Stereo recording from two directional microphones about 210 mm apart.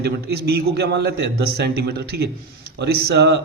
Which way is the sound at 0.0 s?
50° right (ahead or behind).